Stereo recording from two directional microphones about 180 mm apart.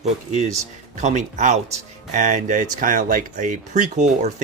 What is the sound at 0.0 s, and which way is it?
Speech, 40° right (ahead or behind).